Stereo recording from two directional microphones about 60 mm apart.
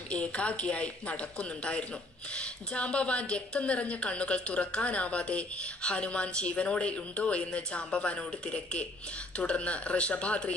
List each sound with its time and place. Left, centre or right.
0.1 s a woman's voice: left